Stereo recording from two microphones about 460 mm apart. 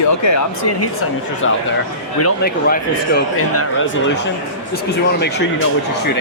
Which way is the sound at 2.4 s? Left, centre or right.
Centre.